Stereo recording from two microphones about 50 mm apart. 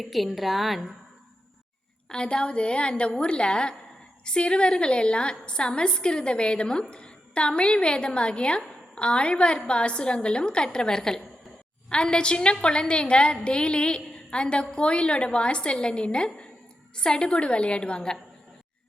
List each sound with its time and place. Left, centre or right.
0.0 s a woman's voice: centre
2.0 s a woman's voice: centre